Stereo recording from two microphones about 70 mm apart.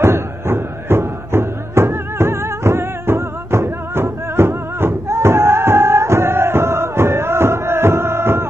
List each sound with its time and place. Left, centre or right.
0.0 s music: right